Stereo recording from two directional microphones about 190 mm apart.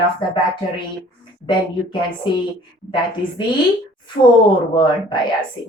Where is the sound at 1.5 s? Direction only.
25° left (ahead or behind).